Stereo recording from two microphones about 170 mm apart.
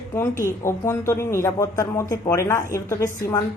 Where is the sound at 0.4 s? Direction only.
15° left (ahead or behind).